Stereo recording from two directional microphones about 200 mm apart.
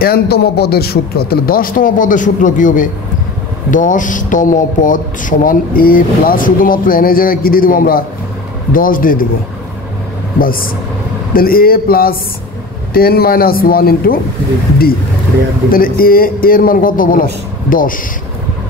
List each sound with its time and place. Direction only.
0.0 s speech: 50° left (ahead or behind)
10.4 s speech: 45° left (ahead or behind)
15.7 s speech: 45° left (ahead or behind)